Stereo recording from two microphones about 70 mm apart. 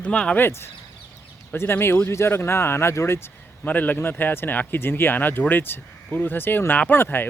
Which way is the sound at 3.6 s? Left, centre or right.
Left.